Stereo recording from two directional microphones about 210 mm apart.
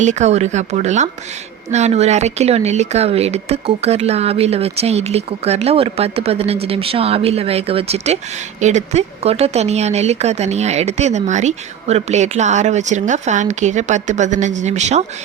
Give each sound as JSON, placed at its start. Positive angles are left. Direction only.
{"t": 0.0, "sound": "speech", "side_deg": -35}